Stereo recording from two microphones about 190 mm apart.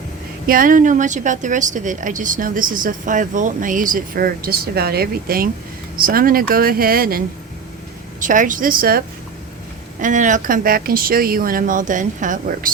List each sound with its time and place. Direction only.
0.4 s speech: 45° right (ahead or behind)
8.2 s speech: 45° right (ahead or behind)